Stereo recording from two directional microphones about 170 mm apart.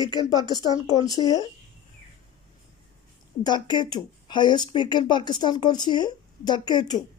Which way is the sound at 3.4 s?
25° left (ahead or behind).